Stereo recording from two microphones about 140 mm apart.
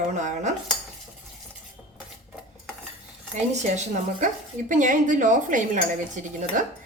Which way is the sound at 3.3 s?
55° right (ahead or behind).